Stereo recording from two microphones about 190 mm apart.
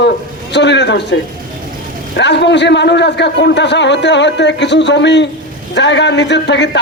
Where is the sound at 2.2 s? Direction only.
65° left (ahead or behind).